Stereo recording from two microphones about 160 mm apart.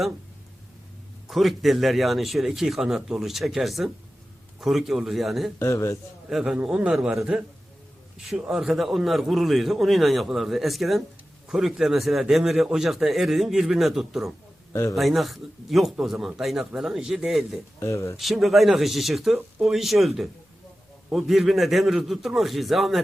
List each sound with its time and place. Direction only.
1.3 s a man's voice: centre (ahead or behind)
5.5 s a man's voice: 15° left (ahead or behind)
6.3 s a man's voice: 5° right (ahead or behind)
14.7 s a man's voice: 15° left (ahead or behind)
14.9 s a man's voice: centre (ahead or behind)
17.7 s a man's voice: 20° left (ahead or behind)
18.2 s a man's voice: centre (ahead or behind)